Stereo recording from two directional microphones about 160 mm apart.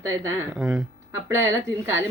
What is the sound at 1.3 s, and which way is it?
Speech, 15° right (ahead or behind).